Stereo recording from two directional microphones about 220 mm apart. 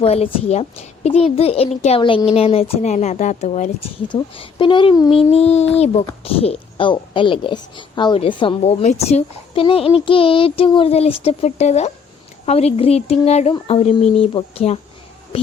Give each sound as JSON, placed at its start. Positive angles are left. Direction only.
{"t": 0.0, "sound": "a woman's voice", "side_deg": 30}